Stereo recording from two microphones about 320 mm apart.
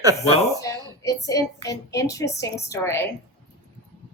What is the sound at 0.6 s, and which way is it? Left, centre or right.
A woman's voice, centre.